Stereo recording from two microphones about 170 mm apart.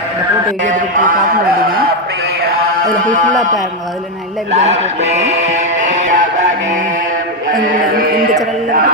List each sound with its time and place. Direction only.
0.6 s a man's voice: 50° right (ahead or behind)
2.4 s mantra: 55° right (ahead or behind)
7.5 s a man's voice: 55° right (ahead or behind)